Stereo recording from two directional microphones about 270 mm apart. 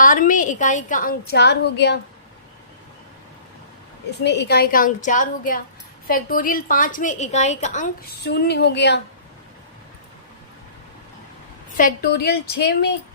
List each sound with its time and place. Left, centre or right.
0.0 s a woman's voice: left
4.2 s a woman's voice: left
8.2 s a woman's voice: left
11.8 s a woman's voice: left